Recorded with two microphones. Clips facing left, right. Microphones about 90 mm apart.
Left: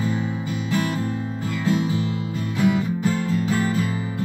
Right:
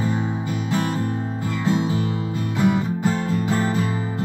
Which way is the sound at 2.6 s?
35° right (ahead or behind).